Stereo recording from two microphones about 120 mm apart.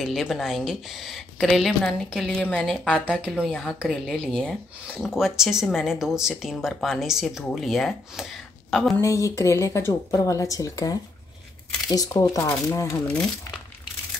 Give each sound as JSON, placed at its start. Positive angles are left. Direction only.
{"t": 0.0, "sound": "speech", "side_deg": -5}
{"t": 3.1, "sound": "speech", "side_deg": -10}
{"t": 3.4, "sound": "speech", "side_deg": 5}
{"t": 5.0, "sound": "speech", "side_deg": -5}
{"t": 8.9, "sound": "a woman's voice", "side_deg": 25}
{"t": 12.1, "sound": "a woman's voice", "side_deg": 25}